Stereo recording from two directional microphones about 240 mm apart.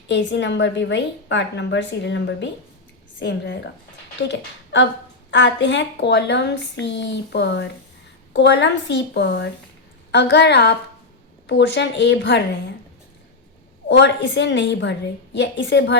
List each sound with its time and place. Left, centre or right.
0.1 s a woman's voice: left
13.8 s a woman's voice: left